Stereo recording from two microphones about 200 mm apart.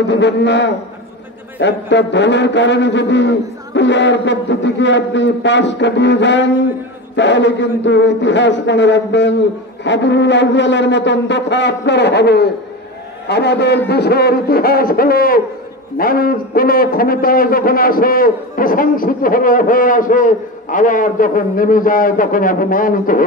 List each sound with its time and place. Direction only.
0.1 s a man's voice: 60° left (ahead or behind); by 23.2 s 45° left (ahead or behind)